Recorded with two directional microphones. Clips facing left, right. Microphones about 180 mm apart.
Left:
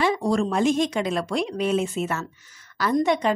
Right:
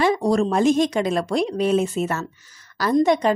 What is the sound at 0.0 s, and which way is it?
Speech, 40° right (ahead or behind).